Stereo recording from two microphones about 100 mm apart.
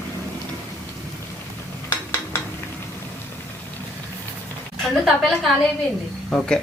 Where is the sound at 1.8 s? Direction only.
25° left (ahead or behind).